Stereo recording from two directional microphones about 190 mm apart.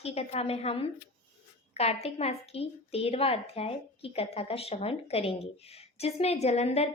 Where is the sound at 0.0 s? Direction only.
35° left (ahead or behind).